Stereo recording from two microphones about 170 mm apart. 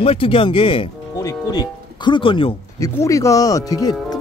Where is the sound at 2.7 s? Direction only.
20° left (ahead or behind).